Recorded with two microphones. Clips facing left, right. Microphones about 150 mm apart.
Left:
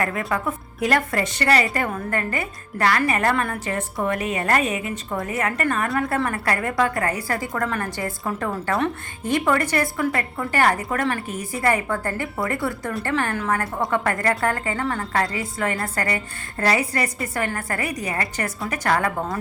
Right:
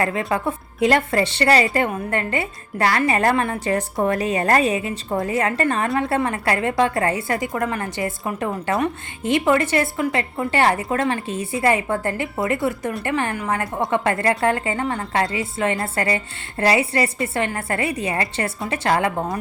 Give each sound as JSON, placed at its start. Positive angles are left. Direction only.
{"t": 0.0, "sound": "a woman's voice", "side_deg": -25}